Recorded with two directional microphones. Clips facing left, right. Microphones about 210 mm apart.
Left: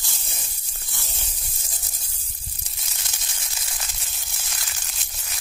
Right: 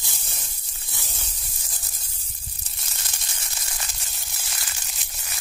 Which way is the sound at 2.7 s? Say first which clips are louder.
Right 1 dB; centre (ahead or behind).